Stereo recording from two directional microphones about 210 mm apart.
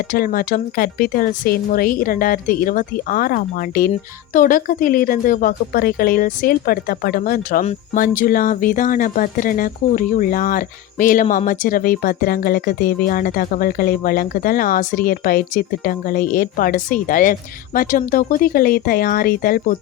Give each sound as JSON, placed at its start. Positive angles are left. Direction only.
{"t": 0.1, "sound": "speech", "side_deg": 40}